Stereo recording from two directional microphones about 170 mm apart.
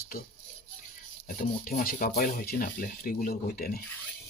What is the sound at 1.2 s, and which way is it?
Speech, 55° left (ahead or behind).